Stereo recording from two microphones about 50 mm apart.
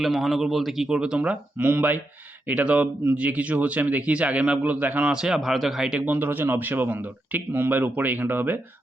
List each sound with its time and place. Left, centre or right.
0.0 s a man's voice: centre
0.9 s speech: centre
1.2 s a man's voice: right
5.1 s a man's voice: centre
6.0 s speech: right